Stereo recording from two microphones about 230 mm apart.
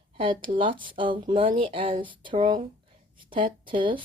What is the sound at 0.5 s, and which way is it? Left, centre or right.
Speech, right.